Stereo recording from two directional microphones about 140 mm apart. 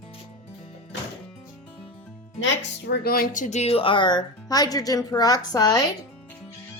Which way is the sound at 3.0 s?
90° left.